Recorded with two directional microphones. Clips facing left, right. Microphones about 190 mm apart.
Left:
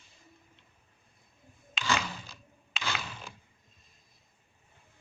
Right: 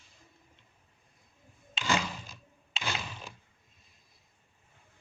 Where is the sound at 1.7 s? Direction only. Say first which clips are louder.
Right 1 dB; 25° right (ahead or behind).